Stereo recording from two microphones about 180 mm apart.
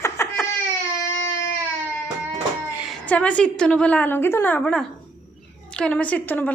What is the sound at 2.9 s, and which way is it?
A woman's voice, 5° left (ahead or behind).